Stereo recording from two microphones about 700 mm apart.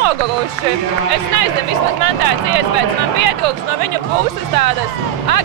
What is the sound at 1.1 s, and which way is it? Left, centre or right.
Speech, right.